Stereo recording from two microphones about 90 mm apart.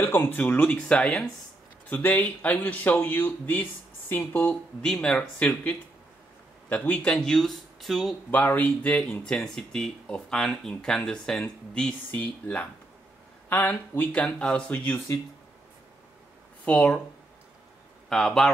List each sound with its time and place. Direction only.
0.0 s speech: 25° left (ahead or behind); by 1.3 s 5° left (ahead or behind)
1.9 s speech: 20° left (ahead or behind)
5.0 s speech: 10° left (ahead or behind)
7.0 s speech: 5° left (ahead or behind)
8.3 s speech: 20° left (ahead or behind)
16.6 s speech: 10° left (ahead or behind)
18.1 s speech: 5° left (ahead or behind)